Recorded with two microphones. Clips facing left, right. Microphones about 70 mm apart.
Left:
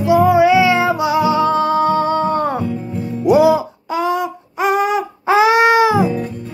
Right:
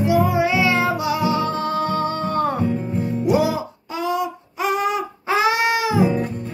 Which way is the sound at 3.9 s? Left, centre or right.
Left.